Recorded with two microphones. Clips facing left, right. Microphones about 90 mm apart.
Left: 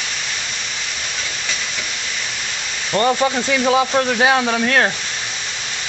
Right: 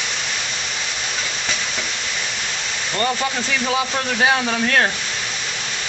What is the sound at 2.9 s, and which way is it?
Speech, 20° left (ahead or behind).